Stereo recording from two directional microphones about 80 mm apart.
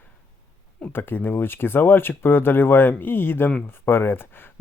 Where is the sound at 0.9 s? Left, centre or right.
Left.